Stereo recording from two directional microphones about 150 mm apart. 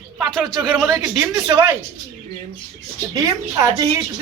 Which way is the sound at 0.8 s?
10° right (ahead or behind).